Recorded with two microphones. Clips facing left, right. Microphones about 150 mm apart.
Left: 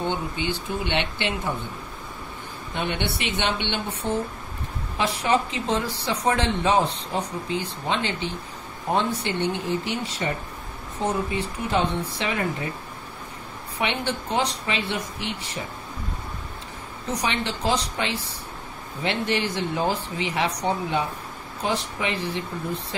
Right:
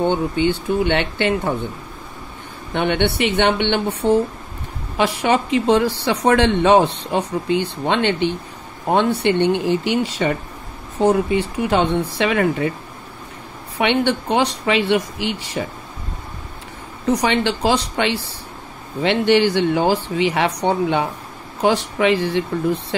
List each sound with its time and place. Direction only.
0.0 s speech: 60° right (ahead or behind)
2.7 s speech: 65° right (ahead or behind); by 12.7 s 80° right
13.7 s speech: 70° right (ahead or behind)
17.2 s speech: 75° right (ahead or behind)